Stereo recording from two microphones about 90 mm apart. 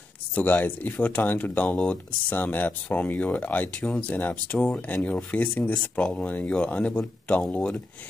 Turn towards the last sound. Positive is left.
turn(degrees=15)  # may be behind; listen again after turning